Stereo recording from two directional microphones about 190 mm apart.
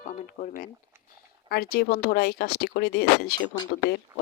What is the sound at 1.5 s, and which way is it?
Speech, 55° left (ahead or behind).